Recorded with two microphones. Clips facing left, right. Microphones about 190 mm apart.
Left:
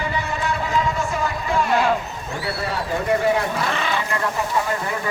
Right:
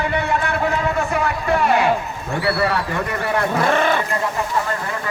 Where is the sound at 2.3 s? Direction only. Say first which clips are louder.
Right 7 dB; 65° right (ahead or behind).